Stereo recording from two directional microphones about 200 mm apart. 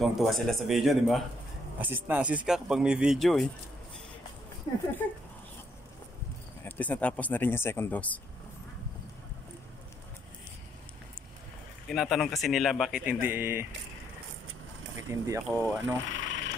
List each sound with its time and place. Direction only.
0.0 s speech: centre (ahead or behind)
4.7 s speech: 20° left (ahead or behind)
6.6 s speech: 5° left (ahead or behind)
11.9 s speech: centre (ahead or behind)
15.0 s speech: 15° right (ahead or behind)
15.4 s speech: centre (ahead or behind)
16.1 s a sound: 70° right (ahead or behind)